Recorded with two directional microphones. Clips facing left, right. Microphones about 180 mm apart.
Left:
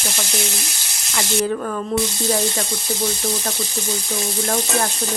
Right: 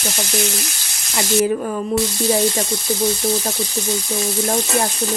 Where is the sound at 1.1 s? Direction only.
20° right (ahead or behind).